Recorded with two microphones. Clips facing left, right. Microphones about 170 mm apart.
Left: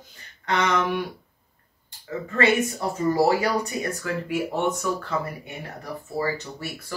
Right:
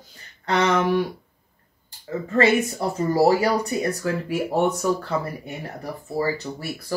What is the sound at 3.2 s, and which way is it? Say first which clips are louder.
Speech: right 5 dB; 35° right (ahead or behind).